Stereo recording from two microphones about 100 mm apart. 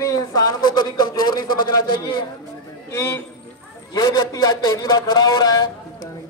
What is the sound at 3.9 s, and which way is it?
A man's voice, 40° left (ahead or behind).